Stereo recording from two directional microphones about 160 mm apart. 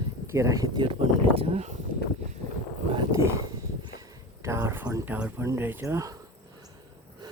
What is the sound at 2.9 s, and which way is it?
Speech, 30° right (ahead or behind).